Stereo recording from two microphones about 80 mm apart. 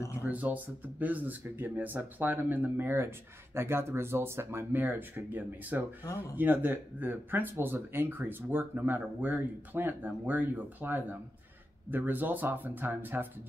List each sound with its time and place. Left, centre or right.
0.2 s speech: right